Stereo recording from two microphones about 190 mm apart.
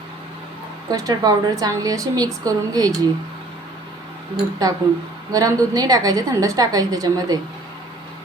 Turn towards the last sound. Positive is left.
turn(degrees=-20)  # may be behind; listen again after turning